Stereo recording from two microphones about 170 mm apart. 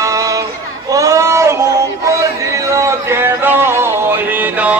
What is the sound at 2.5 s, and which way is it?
Music, 20° right (ahead or behind).